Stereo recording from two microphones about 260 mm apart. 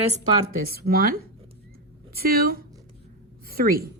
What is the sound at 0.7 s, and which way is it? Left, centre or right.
A woman's voice, right.